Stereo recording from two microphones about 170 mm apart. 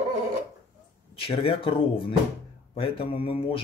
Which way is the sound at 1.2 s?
35° left (ahead or behind).